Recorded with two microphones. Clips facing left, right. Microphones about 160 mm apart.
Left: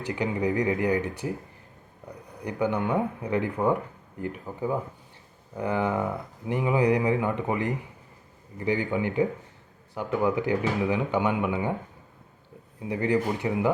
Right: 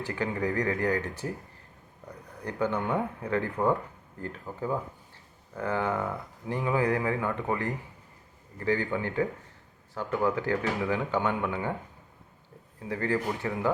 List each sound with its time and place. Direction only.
0.0 s speech: 15° left (ahead or behind)
12.9 s speech: 15° left (ahead or behind)